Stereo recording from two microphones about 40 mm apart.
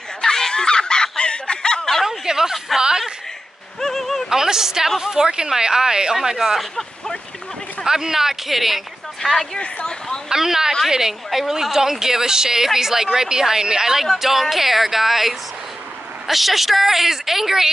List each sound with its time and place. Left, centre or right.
0.2 s snicker: centre
2.0 s a sound: centre
3.8 s a sound: centre
4.3 s speech: centre
7.8 s speech: centre
10.3 s a woman's voice: centre